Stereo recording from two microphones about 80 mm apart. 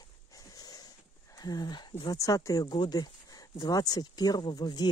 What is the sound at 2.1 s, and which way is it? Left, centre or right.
Speech, left.